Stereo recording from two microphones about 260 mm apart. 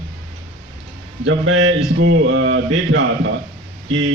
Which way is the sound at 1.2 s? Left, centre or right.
Right.